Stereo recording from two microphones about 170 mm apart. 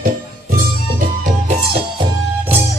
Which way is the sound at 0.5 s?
50° right (ahead or behind).